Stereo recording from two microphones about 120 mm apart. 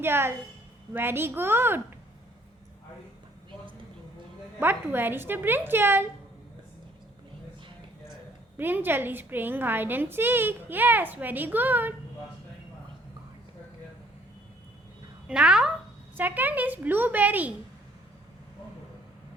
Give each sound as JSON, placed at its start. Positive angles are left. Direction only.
{"t": 0.0, "sound": "a woman's voice", "side_deg": -20}
{"t": 4.6, "sound": "a woman's voice", "side_deg": -15}
{"t": 8.5, "sound": "a woman's voice", "side_deg": -15}
{"t": 15.3, "sound": "a woman's voice", "side_deg": -5}